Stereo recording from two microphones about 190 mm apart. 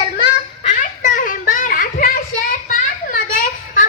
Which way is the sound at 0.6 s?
40° left (ahead or behind).